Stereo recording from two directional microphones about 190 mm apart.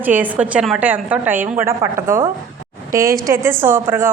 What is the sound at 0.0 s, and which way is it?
A woman's voice, 10° right (ahead or behind).